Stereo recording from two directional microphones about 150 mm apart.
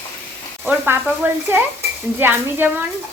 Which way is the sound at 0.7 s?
10° right (ahead or behind).